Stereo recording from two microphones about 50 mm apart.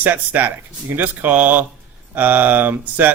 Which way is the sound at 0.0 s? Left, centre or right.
Right.